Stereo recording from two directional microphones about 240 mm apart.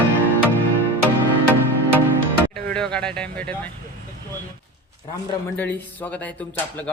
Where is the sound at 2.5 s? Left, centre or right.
Centre.